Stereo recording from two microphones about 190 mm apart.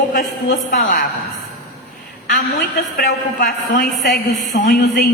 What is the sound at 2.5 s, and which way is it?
A woman's voice, 50° left (ahead or behind).